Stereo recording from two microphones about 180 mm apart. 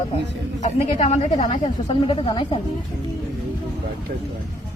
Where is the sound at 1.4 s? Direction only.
30° left (ahead or behind).